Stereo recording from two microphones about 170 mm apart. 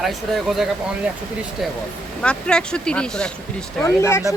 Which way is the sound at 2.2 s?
5° left (ahead or behind).